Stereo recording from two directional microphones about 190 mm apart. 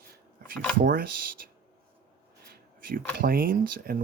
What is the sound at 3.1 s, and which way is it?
Speech, 50° right (ahead or behind).